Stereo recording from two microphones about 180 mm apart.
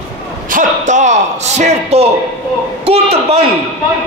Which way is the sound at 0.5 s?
45° right (ahead or behind).